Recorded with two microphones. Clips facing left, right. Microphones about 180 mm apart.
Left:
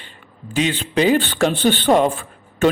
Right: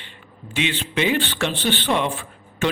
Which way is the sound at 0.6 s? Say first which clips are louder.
Left 5 dB; 40° left (ahead or behind).